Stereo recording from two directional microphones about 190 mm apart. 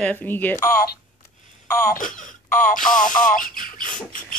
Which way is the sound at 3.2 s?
45° left (ahead or behind).